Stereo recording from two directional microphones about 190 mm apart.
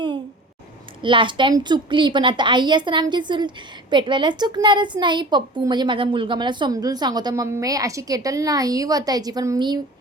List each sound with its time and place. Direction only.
1.0 s a woman's voice: 25° right (ahead or behind)